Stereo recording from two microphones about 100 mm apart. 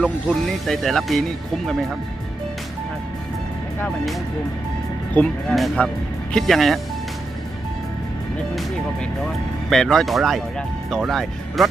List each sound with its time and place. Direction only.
0.3 s speech: centre (ahead or behind)
3.8 s speech: centre (ahead or behind)
5.1 s speech: 10° left (ahead or behind)
5.5 s speech: centre (ahead or behind)
8.5 s speech: 5° left (ahead or behind)